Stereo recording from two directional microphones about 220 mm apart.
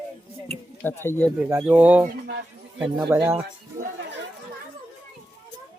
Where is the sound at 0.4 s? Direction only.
10° left (ahead or behind).